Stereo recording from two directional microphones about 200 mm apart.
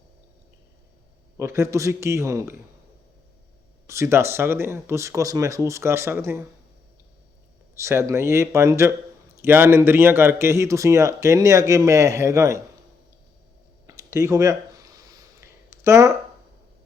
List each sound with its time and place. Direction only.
1.4 s speech: 15° right (ahead or behind)
3.8 s speech: 15° right (ahead or behind)
7.8 s speech: 15° right (ahead or behind)
13.8 s a sound: 15° right (ahead or behind)